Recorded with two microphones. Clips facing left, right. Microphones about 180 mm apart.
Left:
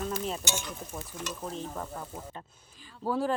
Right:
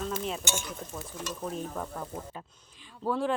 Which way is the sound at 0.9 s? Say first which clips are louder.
Left 1 dB; 15° left (ahead or behind).